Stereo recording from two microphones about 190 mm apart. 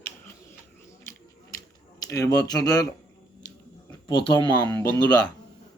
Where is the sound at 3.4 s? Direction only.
20° left (ahead or behind).